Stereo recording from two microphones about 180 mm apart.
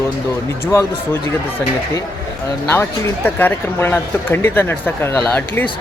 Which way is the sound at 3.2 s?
10° left (ahead or behind).